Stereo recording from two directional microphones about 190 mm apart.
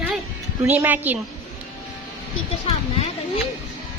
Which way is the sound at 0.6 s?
10° right (ahead or behind).